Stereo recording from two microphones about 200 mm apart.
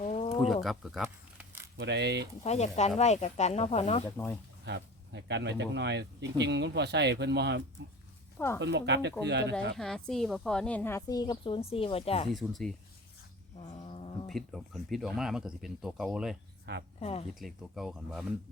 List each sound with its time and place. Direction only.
0.0 s a sound: 35° left (ahead or behind)
0.4 s speech: centre (ahead or behind)
1.8 s speech: 60° right (ahead or behind)
2.4 s speech: 35° left (ahead or behind)
4.6 s speech: 60° right (ahead or behind)
9.7 s a woman's voice: centre (ahead or behind); by 12.3 s 30° left (ahead or behind)
12.3 s speech: centre (ahead or behind)
13.7 s cat: 30° left (ahead or behind)
14.3 s speech: centre (ahead or behind)
16.7 s speech: 55° right (ahead or behind)
17.0 s speech: 30° left (ahead or behind)
17.4 s speech: centre (ahead or behind)